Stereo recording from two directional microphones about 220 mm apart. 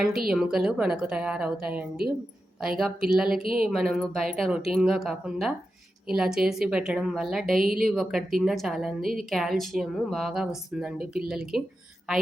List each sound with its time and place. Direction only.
0.0 s a woman's voice: centre (ahead or behind)